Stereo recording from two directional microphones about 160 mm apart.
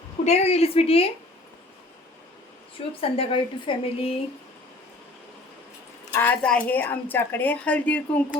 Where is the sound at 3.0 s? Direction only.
35° left (ahead or behind).